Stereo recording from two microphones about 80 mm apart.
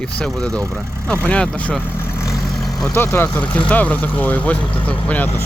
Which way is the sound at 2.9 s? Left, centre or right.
Left.